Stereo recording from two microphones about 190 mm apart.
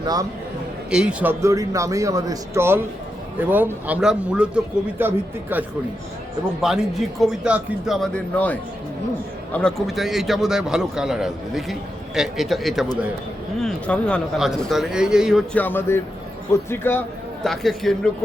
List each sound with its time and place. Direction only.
0.0 s a man's voice: 20° right (ahead or behind)
0.9 s a man's voice: 5° right (ahead or behind)
15.5 s a man's voice: 10° left (ahead or behind)